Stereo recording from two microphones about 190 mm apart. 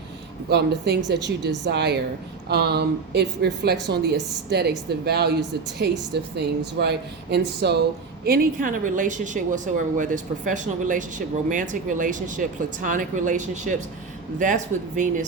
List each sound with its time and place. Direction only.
0.5 s a woman's voice: 60° right (ahead or behind)
6.3 s a woman's voice: 60° right (ahead or behind); by 15.2 s 40° right (ahead or behind)